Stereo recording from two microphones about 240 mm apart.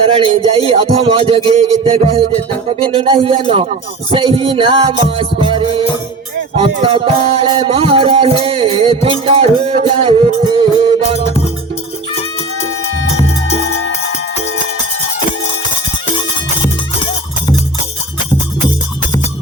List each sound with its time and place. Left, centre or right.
0.2 s music: right